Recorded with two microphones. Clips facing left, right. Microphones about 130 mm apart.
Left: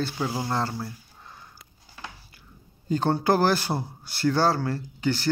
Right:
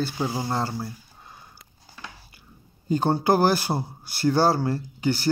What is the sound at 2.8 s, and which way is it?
Speech, 10° right (ahead or behind).